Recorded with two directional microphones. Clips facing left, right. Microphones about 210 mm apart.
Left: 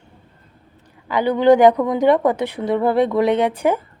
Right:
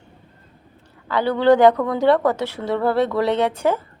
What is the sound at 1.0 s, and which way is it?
A woman's voice, 15° left (ahead or behind).